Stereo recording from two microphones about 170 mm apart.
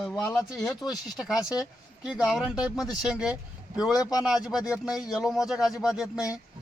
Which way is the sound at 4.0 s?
20° left (ahead or behind).